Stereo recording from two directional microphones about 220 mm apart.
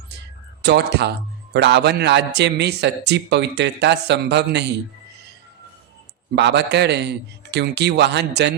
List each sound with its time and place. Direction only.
0.6 s a man's voice: 50° right (ahead or behind)
6.3 s a man's voice: 50° right (ahead or behind)